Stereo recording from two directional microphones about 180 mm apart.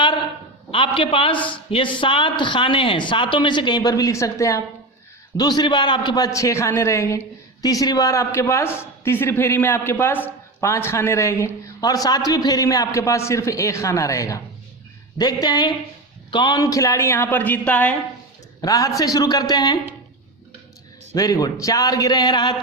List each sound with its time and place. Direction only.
0.9 s a man's voice: 30° left (ahead or behind); by 17.9 s 10° left (ahead or behind)
18.6 s speech: 20° left (ahead or behind)
21.2 s speech: 20° left (ahead or behind)